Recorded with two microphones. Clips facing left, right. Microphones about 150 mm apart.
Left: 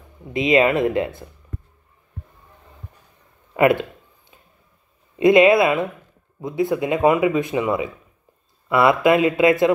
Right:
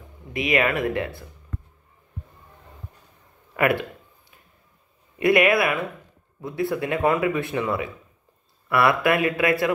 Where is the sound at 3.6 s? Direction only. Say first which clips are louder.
Left 5 dB; 20° left (ahead or behind).